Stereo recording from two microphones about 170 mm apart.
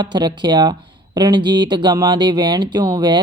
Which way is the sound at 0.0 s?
25° right (ahead or behind).